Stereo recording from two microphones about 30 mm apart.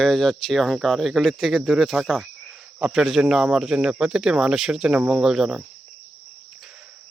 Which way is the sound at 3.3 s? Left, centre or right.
Right.